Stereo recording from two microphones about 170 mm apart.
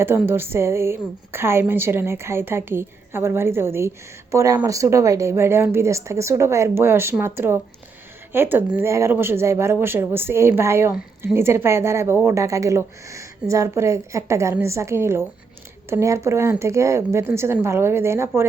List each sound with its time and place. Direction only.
0.0 s a woman's voice: 15° right (ahead or behind)